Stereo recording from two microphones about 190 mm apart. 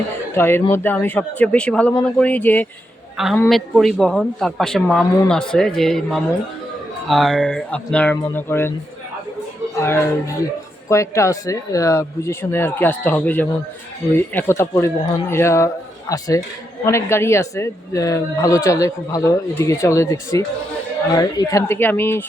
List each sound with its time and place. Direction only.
0.3 s speech: 10° left (ahead or behind)
9.7 s speech: 15° left (ahead or behind)